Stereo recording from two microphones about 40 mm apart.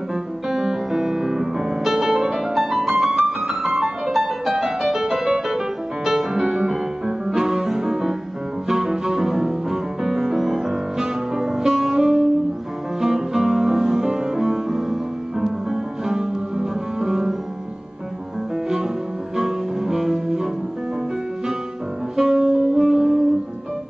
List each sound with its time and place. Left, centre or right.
0.5 s music: centre
19.3 s music: centre
22.1 s music: centre